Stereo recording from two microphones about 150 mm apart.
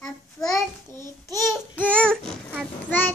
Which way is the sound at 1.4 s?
15° left (ahead or behind).